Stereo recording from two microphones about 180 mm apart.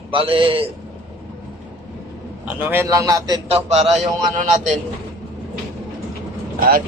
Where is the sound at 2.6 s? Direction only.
15° right (ahead or behind).